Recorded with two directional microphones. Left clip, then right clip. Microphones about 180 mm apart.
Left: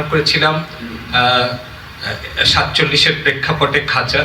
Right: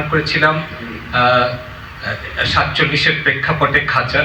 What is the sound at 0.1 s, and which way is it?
A man's voice, 30° left (ahead or behind).